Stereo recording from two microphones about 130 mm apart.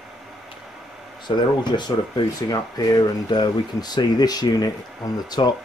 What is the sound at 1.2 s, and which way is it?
Speech, 35° left (ahead or behind).